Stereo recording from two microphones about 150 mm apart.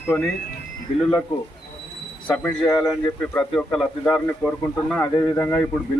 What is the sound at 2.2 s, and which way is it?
Speech, 10° left (ahead or behind).